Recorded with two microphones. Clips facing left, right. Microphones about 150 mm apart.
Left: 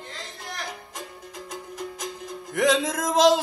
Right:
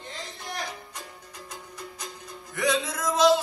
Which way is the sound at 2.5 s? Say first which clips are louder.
Left 5 dB; 90° left.